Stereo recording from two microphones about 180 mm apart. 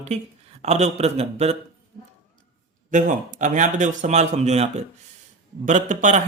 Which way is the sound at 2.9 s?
45° right (ahead or behind).